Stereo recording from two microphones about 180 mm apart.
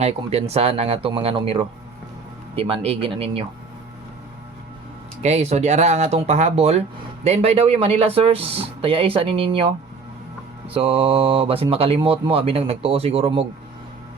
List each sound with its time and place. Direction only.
0.0 s speech: 35° right (ahead or behind)
5.2 s speech: 40° right (ahead or behind)
10.8 s speech: 30° right (ahead or behind)